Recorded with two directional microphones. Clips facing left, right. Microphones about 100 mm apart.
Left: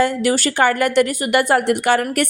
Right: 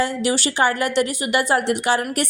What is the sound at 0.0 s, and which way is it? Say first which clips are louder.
Speech: left 4 dB; 50° left (ahead or behind).